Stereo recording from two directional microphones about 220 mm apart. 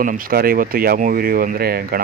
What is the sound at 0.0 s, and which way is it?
Speech, 40° right (ahead or behind).